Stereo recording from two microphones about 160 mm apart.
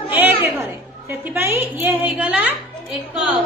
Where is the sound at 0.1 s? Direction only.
10° right (ahead or behind).